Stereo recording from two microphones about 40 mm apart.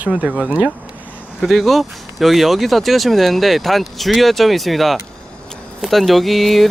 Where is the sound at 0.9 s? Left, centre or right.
Right.